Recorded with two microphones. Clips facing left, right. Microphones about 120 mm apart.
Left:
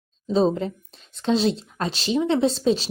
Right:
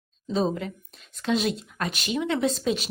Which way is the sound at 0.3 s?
30° left (ahead or behind).